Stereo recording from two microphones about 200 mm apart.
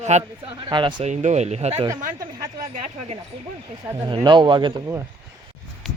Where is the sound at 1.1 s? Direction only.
35° right (ahead or behind).